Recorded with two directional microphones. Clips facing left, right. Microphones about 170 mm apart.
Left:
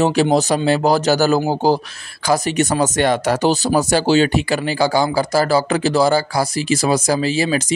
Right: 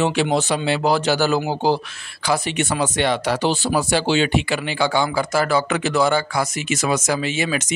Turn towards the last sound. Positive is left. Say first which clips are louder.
# left 4 dB
turn(degrees=35)  # may be behind; listen again after turning